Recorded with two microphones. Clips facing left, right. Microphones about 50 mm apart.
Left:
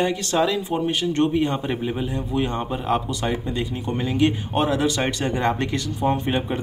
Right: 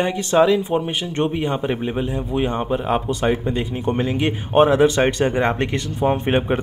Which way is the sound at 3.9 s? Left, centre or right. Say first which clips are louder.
Left 3 dB; centre.